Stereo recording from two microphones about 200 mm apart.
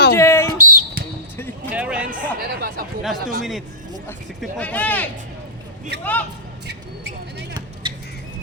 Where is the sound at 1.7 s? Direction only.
5° right (ahead or behind).